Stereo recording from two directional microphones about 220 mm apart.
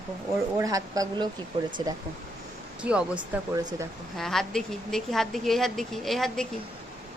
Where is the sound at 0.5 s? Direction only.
15° right (ahead or behind).